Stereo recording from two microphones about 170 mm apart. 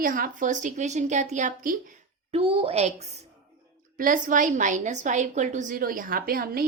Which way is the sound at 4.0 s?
50° right (ahead or behind).